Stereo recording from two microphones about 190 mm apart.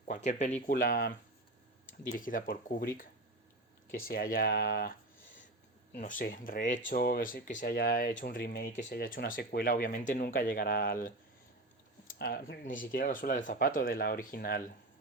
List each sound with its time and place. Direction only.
0.1 s speech: 40° left (ahead or behind)
0.7 s speech: 50° left (ahead or behind)
5.9 s speech: 45° left (ahead or behind)